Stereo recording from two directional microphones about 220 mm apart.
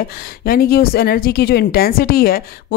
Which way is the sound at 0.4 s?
45° left (ahead or behind).